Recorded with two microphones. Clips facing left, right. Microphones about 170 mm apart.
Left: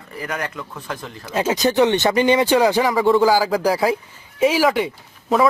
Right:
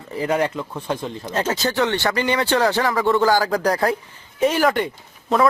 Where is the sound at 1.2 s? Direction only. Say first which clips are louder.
Left 4 dB; 10° left (ahead or behind).